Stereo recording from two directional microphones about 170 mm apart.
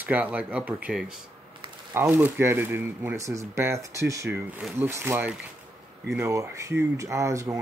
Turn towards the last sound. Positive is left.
turn(degrees=-20)  # may be behind; listen again after turning